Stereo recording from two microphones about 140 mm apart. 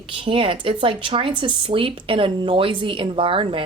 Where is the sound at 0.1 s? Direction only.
40° right (ahead or behind).